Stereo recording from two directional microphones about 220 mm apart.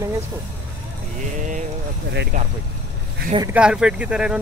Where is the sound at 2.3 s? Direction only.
35° right (ahead or behind).